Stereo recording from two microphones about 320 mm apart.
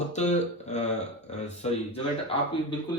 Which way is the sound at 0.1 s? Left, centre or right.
Left.